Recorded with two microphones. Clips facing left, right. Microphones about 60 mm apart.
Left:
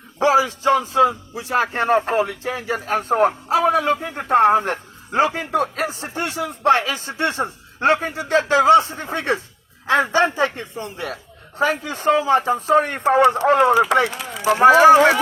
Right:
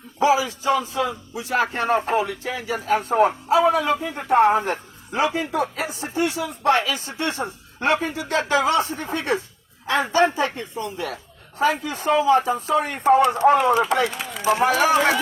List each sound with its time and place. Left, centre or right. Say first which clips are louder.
0.2 s a man's voice: left 3 dB; left
0.8 s speech: left 8 dB; left
2.8 s a man's voice: even; left
5.5 s a man's voice: left 3 dB; left
13.8 s speech: left 3 dB; left